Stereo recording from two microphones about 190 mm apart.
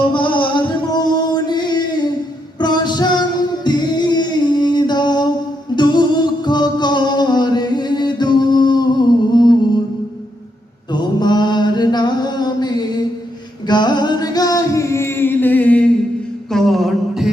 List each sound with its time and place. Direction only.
0.1 s music: 25° left (ahead or behind)
10.9 s mantra: 20° left (ahead or behind)
13.7 s music: 25° left (ahead or behind); by 15.9 s 5° left (ahead or behind)
16.5 s a sound: centre (ahead or behind)